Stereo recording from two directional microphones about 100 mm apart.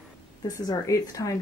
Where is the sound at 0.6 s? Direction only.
35° left (ahead or behind).